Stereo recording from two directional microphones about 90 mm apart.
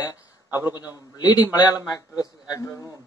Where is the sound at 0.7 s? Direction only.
50° left (ahead or behind).